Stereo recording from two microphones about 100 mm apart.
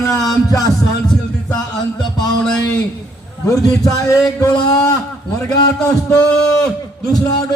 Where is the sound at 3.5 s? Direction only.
35° left (ahead or behind).